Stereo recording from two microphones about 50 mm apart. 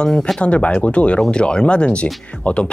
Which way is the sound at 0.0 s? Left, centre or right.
Centre.